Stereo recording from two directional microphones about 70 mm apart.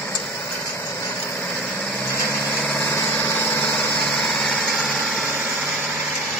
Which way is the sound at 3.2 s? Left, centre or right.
Left.